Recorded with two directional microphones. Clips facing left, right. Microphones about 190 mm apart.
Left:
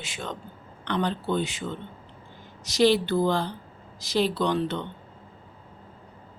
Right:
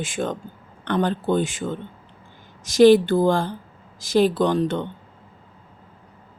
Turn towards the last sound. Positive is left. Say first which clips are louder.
# right 5 dB
turn(degrees=-45)  # may be behind; listen again after turning